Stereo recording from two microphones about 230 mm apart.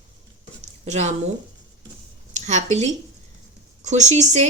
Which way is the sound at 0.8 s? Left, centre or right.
Right.